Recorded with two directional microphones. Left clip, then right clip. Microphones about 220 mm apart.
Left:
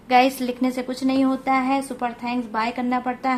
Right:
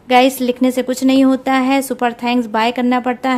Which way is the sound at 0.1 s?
30° right (ahead or behind).